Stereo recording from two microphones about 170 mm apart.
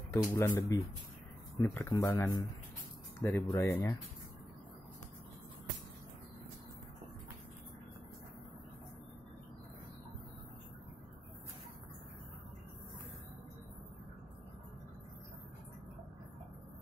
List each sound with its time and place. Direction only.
0.1 s speech: 15° left (ahead or behind)